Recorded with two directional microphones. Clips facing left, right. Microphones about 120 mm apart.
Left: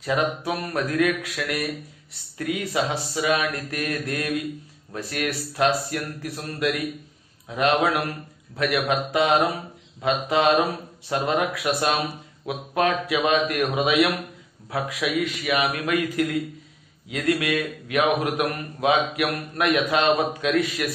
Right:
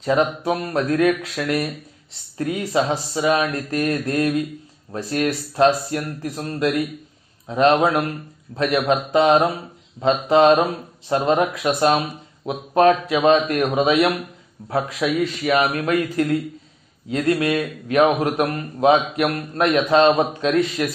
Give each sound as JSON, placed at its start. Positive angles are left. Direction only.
{"t": 0.0, "sound": "a man's voice", "side_deg": -30}